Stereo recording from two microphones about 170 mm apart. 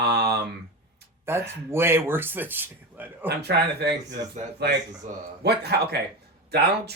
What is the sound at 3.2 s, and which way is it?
Speech, 75° right (ahead or behind).